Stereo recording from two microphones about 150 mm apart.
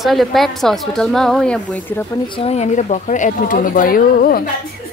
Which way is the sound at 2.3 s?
45° left (ahead or behind).